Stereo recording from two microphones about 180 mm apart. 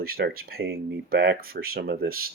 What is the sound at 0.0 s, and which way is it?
Speech, 55° right (ahead or behind).